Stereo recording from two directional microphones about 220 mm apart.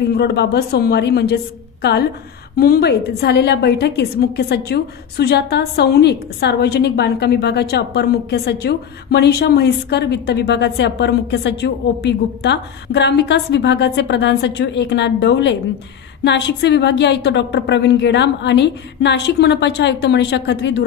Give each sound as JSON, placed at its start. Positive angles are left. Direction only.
{"t": 0.1, "sound": "a woman's voice", "side_deg": 50}